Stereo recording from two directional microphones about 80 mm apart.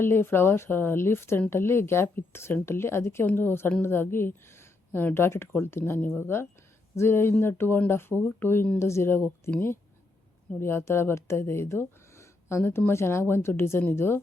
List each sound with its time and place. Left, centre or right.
0.0 s speech: left
10.6 s speech: left